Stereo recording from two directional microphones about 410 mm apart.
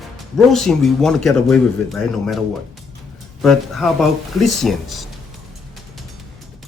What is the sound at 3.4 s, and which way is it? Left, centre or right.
Speech, centre.